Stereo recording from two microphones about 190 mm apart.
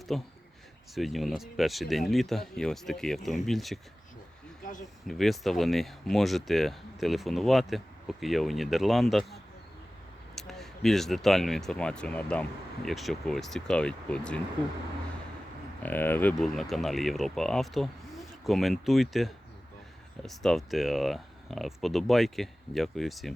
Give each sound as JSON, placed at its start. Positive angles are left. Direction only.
{"t": 0.1, "sound": "speech", "side_deg": 0}
{"t": 4.6, "sound": "speech", "side_deg": 40}
{"t": 5.0, "sound": "speech", "side_deg": 0}
{"t": 15.8, "sound": "speech", "side_deg": 10}